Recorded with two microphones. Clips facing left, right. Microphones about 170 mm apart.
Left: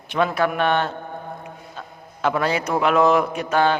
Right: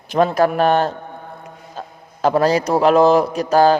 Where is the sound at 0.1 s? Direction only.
40° right (ahead or behind).